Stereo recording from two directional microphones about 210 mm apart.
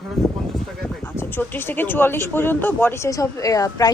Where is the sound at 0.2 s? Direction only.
Centre (ahead or behind).